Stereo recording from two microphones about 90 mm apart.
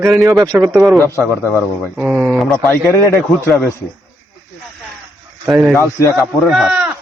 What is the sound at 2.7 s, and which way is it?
Speech, 30° left (ahead or behind).